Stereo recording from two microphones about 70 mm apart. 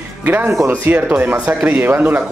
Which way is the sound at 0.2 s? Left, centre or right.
Right.